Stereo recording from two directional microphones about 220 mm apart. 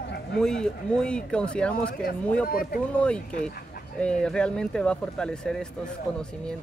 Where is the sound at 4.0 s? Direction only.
5° left (ahead or behind).